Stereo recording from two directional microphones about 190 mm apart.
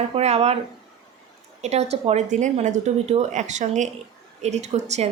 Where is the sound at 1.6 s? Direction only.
35° right (ahead or behind).